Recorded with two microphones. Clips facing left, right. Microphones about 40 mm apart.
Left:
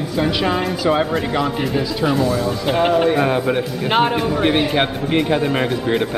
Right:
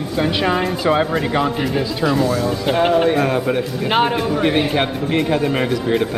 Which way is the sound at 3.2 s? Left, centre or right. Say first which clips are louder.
Even; centre.